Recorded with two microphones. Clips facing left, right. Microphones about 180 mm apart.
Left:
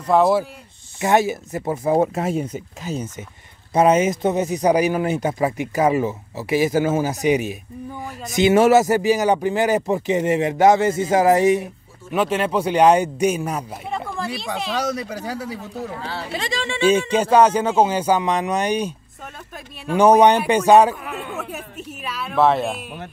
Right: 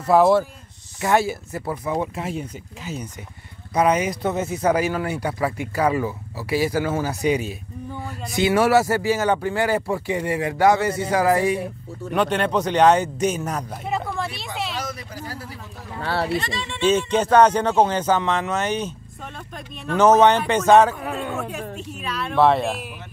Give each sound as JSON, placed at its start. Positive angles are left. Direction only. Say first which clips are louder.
{"t": 0.0, "sound": "speech", "louder": "right 1 dB", "side_deg": -5}
{"t": 1.0, "sound": "speech", "louder": "left 2 dB", "side_deg": 20}
{"t": 2.0, "sound": "speech", "louder": "left 7 dB", "side_deg": 45}
{"t": 3.7, "sound": "speech", "louder": "left 4 dB", "side_deg": 25}
{"t": 12.1, "sound": "a man's voice", "louder": "left 1 dB", "side_deg": 5}
{"t": 13.8, "sound": "a sound", "louder": "right 2 dB", "side_deg": 0}
{"t": 15.0, "sound": "speech", "louder": "left 7 dB", "side_deg": 80}
{"t": 16.0, "sound": "speech", "louder": "right 6 dB", "side_deg": -65}
{"t": 16.3, "sound": "speech", "louder": "left 2 dB", "side_deg": 90}
{"t": 17.1, "sound": "a man's voice", "louder": "left 1 dB", "side_deg": 10}
{"t": 21.9, "sound": "speech", "louder": "even", "side_deg": 5}